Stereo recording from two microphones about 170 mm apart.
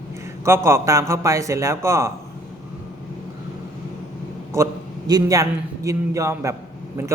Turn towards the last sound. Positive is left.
turn(degrees=-15)  # may be behind; listen again after turning